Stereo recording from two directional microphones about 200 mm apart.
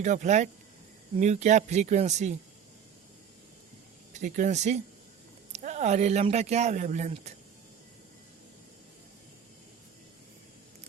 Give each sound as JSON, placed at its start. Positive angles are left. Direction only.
{"t": 0.0, "sound": "speech", "side_deg": -35}
{"t": 4.1, "sound": "speech", "side_deg": -40}